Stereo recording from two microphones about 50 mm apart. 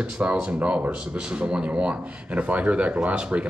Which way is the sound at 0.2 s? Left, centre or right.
Right.